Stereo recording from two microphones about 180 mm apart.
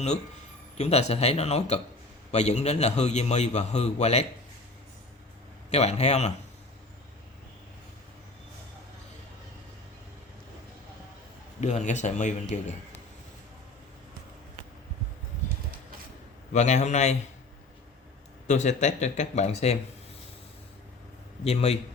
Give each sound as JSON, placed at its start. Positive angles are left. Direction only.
{"t": 0.8, "sound": "a man's voice", "side_deg": 35}
{"t": 5.7, "sound": "a man's voice", "side_deg": 35}
{"t": 11.6, "sound": "a man's voice", "side_deg": 40}
{"t": 16.5, "sound": "a man's voice", "side_deg": 40}
{"t": 18.4, "sound": "a man's voice", "side_deg": 40}
{"t": 21.4, "sound": "a man's voice", "side_deg": 35}